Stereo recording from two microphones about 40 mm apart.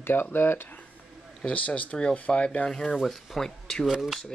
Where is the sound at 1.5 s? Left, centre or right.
Left.